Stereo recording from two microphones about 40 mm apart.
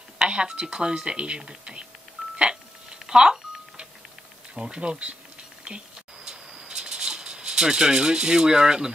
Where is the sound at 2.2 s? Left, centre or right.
Centre.